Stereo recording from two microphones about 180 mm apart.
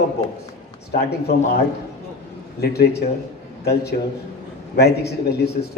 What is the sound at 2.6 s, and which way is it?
A man's voice, 65° left (ahead or behind).